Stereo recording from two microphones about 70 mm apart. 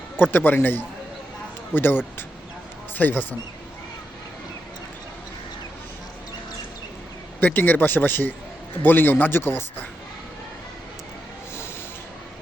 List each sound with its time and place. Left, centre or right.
0.2 s a man's voice: left
7.3 s a man's voice: left